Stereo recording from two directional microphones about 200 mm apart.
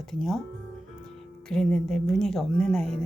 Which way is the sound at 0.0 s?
Centre (ahead or behind).